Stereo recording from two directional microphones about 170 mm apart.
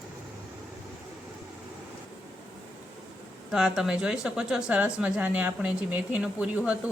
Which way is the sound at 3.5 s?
5° right (ahead or behind).